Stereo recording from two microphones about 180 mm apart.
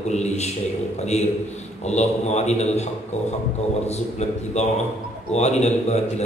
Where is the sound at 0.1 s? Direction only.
40° left (ahead or behind).